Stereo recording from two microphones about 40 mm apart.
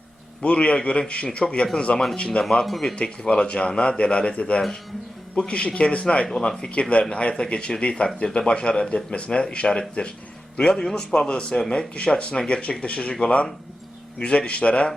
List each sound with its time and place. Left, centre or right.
0.4 s speech: left
2.4 s a man's voice: centre